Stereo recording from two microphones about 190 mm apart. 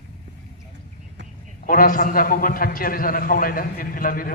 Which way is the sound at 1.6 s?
45° left (ahead or behind).